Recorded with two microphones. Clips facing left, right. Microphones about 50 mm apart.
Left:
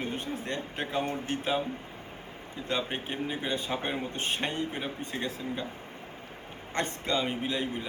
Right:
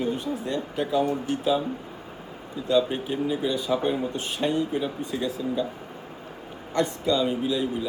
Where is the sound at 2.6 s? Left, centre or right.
Left.